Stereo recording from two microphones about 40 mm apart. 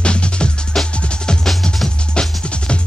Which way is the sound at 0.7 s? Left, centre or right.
Centre.